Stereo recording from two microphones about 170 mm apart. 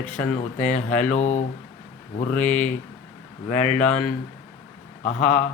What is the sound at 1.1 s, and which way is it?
Speech, 45° left (ahead or behind).